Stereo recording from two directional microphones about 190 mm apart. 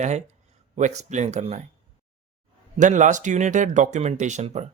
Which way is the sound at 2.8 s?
40° right (ahead or behind).